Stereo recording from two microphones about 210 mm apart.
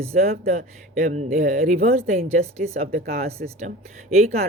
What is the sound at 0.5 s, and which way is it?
Speech, 35° right (ahead or behind).